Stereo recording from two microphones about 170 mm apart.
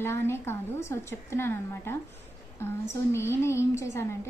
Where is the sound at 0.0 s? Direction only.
15° left (ahead or behind).